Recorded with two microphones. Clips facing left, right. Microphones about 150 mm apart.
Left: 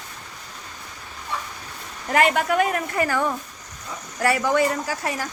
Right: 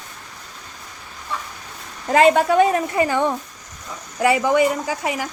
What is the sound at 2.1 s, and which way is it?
A woman's voice, 25° right (ahead or behind).